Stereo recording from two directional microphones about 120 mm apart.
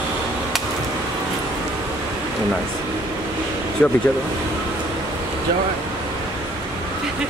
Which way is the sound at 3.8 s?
15° left (ahead or behind).